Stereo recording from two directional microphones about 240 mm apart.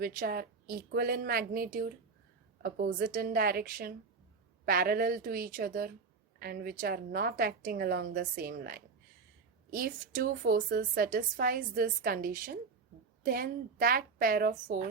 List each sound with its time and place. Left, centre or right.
0.0 s a woman's voice: right